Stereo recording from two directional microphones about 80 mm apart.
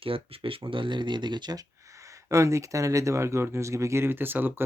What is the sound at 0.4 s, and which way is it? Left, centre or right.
Speech, right.